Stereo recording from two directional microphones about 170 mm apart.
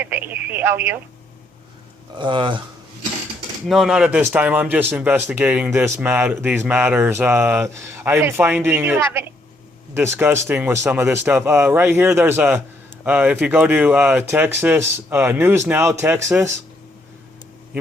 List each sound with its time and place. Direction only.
0.0 s radio: 10° right (ahead or behind)
2.1 s speech: 30° right (ahead or behind)
3.7 s speech: centre (ahead or behind)